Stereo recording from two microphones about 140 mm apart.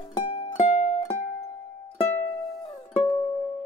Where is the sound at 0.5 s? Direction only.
60° left (ahead or behind).